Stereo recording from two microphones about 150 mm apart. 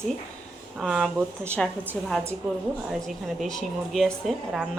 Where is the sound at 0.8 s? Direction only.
Centre (ahead or behind).